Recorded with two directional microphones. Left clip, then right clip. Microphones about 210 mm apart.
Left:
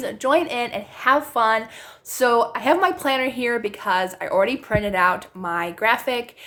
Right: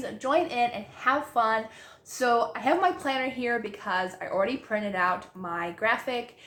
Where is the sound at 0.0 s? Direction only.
50° left (ahead or behind).